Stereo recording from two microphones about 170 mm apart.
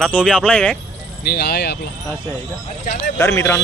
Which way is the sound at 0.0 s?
5° left (ahead or behind).